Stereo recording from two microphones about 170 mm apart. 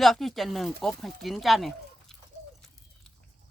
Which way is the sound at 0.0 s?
Centre (ahead or behind).